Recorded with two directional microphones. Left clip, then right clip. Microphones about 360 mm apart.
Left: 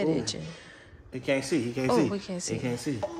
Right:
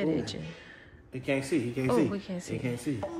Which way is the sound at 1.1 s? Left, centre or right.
Left.